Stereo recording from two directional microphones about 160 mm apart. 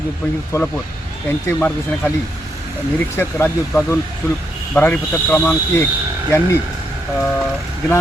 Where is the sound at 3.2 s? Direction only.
15° left (ahead or behind).